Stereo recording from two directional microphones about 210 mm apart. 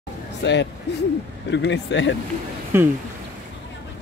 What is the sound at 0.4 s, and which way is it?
Speech, 60° left (ahead or behind).